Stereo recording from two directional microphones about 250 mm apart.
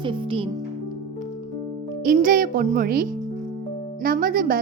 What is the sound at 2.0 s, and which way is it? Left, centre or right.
A child's voice, right.